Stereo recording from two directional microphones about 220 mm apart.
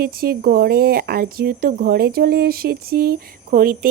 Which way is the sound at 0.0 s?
45° right (ahead or behind).